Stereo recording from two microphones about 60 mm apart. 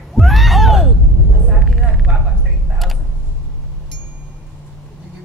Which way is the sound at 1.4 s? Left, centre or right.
Centre.